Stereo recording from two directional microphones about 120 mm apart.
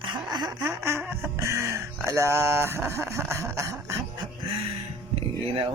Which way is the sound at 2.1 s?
20° right (ahead or behind).